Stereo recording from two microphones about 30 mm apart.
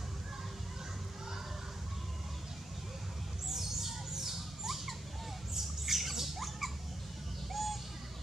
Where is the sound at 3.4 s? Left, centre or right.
Centre.